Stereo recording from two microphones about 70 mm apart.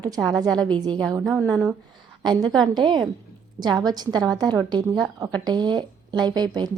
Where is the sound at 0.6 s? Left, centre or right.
Right.